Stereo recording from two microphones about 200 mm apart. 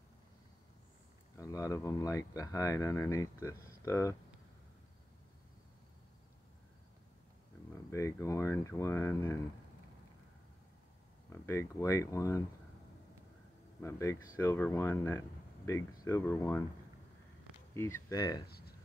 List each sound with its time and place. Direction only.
1.3 s speech: 15° left (ahead or behind)
7.7 s speech: 15° left (ahead or behind)
11.4 s speech: 15° left (ahead or behind)
13.7 s speech: 15° left (ahead or behind)
17.7 s speech: 15° left (ahead or behind)